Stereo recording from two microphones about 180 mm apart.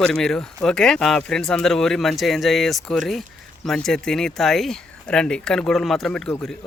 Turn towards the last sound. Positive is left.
turn(degrees=5)  # may be behind; listen again after turning